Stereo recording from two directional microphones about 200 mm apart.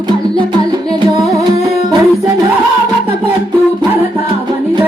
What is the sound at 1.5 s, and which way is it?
Music, 20° right (ahead or behind).